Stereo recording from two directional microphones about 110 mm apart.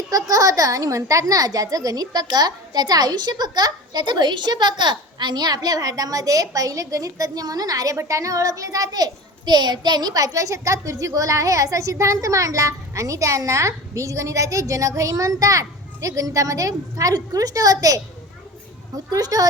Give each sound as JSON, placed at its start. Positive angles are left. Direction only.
{"t": 0.1, "sound": "a child's voice", "side_deg": -35}
{"t": 19.1, "sound": "a child's voice", "side_deg": -35}